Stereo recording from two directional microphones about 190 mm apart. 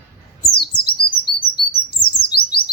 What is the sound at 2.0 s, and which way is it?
Chirp, 55° left (ahead or behind).